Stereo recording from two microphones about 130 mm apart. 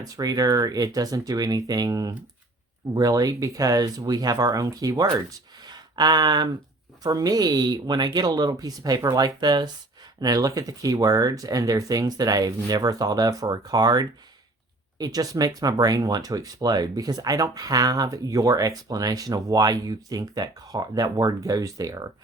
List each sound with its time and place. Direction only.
0.0 s speech: 30° right (ahead or behind)
5.6 s a sound: 35° right (ahead or behind)
7.0 s speech: 30° right (ahead or behind)